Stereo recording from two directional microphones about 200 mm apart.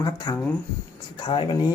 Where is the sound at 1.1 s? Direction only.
25° left (ahead or behind).